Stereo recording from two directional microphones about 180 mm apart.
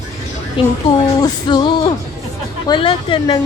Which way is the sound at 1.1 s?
20° left (ahead or behind).